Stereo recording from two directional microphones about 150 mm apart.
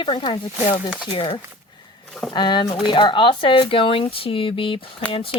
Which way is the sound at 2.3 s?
30° left (ahead or behind).